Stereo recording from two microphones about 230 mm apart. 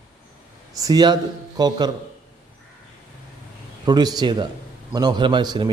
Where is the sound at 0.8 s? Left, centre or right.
Centre.